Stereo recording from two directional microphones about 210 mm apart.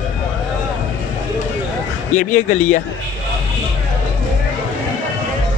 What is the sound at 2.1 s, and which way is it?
Speech, 35° left (ahead or behind).